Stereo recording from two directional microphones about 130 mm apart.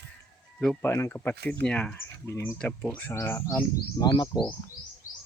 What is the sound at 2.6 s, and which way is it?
Speech, 10° left (ahead or behind).